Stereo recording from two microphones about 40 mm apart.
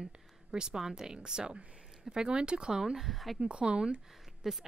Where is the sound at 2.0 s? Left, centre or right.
Right.